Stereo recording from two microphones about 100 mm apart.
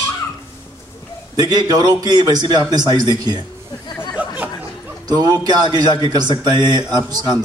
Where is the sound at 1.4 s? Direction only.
40° right (ahead or behind).